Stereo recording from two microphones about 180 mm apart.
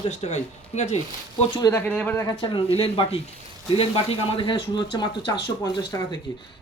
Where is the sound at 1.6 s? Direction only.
15° left (ahead or behind).